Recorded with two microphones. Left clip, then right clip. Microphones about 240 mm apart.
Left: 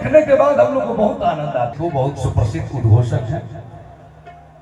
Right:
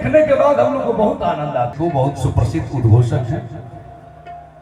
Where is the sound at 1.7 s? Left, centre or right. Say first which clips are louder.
Right 2 dB; right.